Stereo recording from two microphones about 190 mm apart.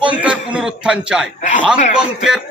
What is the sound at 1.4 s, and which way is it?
Speech, 40° left (ahead or behind).